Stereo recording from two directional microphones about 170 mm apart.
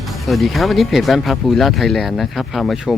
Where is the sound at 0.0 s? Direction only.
Centre (ahead or behind).